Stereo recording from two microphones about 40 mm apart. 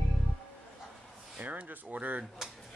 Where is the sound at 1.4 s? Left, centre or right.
Right.